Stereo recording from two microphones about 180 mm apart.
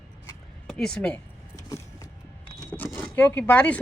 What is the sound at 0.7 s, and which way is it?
Speech, 5° left (ahead or behind).